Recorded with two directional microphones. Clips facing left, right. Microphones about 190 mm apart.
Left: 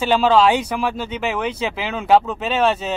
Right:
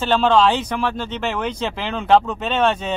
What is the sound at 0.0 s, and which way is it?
Speech, 10° left (ahead or behind).